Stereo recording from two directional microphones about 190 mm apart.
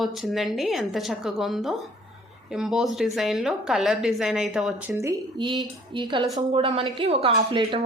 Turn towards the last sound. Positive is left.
turn(degrees=-25)  # may be behind; listen again after turning